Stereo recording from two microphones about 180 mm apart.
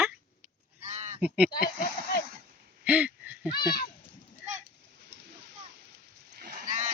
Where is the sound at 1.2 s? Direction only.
10° right (ahead or behind).